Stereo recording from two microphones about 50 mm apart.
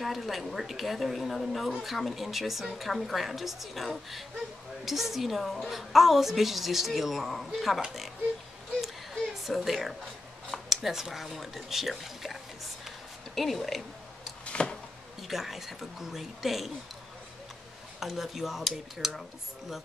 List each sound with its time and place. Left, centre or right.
0.0 s a woman's voice: centre
9.4 s a woman's voice: centre
12.8 s a sound: centre
14.4 s a sound: left
15.2 s a woman's voice: centre
18.0 s a woman's voice: centre